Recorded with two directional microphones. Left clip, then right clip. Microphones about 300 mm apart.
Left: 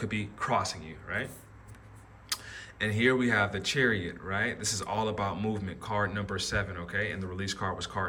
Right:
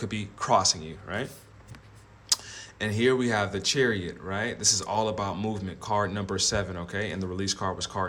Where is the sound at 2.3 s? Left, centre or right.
Centre.